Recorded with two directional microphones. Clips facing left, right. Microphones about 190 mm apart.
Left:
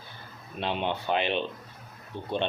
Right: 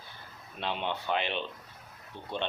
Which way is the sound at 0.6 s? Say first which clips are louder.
Left 4 dB; 20° left (ahead or behind).